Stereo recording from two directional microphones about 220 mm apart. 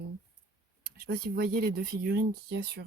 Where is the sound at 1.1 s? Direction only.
45° right (ahead or behind).